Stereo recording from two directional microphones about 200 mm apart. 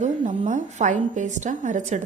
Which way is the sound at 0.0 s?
35° right (ahead or behind).